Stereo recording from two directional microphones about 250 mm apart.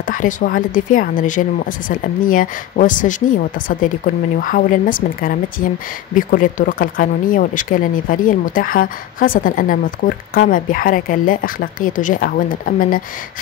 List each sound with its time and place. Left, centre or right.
0.0 s speech: left